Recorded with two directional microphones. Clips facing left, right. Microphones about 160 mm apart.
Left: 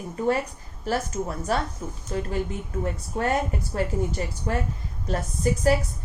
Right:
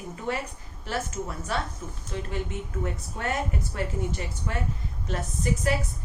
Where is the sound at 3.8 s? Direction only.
35° left (ahead or behind).